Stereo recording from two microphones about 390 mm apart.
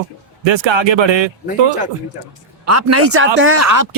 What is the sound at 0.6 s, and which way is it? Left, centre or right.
Speech, right.